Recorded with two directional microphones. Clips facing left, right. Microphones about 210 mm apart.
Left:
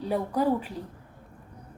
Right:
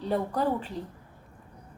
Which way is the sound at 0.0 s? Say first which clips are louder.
Left 1 dB; 10° left (ahead or behind).